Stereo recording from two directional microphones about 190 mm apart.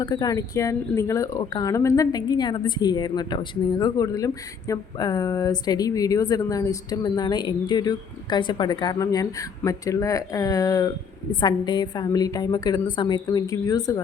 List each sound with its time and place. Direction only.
0.0 s speech: 20° left (ahead or behind)